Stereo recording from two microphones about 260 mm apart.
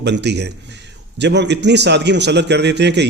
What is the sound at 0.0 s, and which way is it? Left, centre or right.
A man's voice, right.